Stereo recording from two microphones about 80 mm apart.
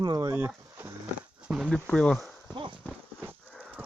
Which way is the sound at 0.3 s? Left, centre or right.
Right.